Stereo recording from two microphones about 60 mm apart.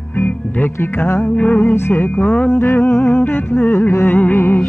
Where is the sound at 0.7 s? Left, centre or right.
Left.